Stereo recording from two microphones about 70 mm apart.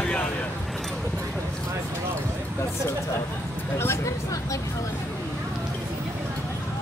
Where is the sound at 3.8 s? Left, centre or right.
Left.